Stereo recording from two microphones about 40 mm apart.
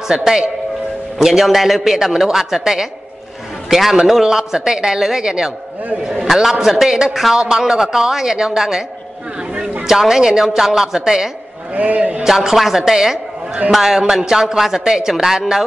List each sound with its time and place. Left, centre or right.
0.1 s a man's voice: centre
4.1 s a man's voice: centre
9.8 s a man's voice: centre
11.7 s a man's voice: right
12.2 s a man's voice: centre
13.9 s a man's voice: centre